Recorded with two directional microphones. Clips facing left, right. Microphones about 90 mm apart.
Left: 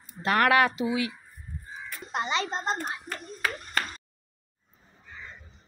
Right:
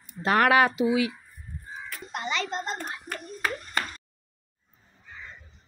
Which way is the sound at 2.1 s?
25° left (ahead or behind).